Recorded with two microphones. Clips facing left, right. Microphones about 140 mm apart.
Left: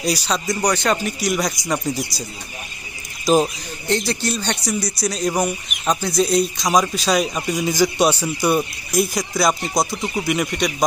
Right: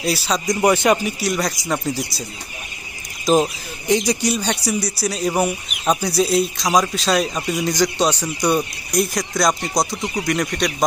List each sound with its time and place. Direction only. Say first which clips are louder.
0.0 s speech: right 1 dB; 5° right (ahead or behind)
0.6 s a man's voice: right 5 dB; 20° right (ahead or behind)
1.0 s speech: even; centre (ahead or behind)
3.2 s speech: even; centre (ahead or behind)
3.8 s speech: right 3 dB; 15° right (ahead or behind); by 10.8 s 5° left (ahead or behind)